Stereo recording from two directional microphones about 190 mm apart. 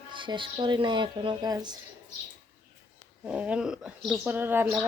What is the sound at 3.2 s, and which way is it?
Speech, 5° right (ahead or behind).